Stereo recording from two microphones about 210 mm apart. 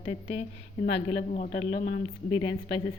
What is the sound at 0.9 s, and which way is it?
Speech, 55° left (ahead or behind).